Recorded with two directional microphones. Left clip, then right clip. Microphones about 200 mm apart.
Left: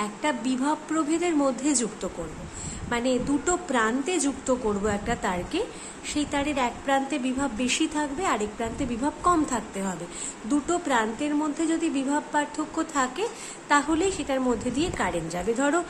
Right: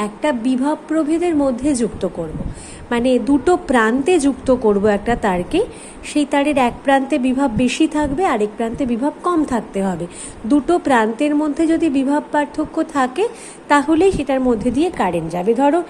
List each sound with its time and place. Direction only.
0.0 s a woman's voice: 20° right (ahead or behind)